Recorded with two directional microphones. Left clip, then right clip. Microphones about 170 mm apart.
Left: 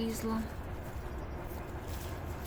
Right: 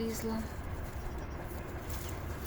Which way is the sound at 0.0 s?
15° left (ahead or behind).